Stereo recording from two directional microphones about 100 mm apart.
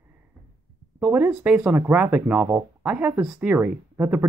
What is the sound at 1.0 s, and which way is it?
Speech, 15° right (ahead or behind).